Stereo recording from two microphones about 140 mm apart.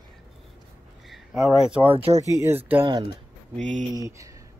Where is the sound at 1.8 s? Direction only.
45° right (ahead or behind).